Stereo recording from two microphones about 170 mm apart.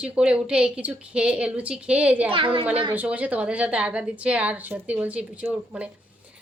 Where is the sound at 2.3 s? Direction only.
30° right (ahead or behind).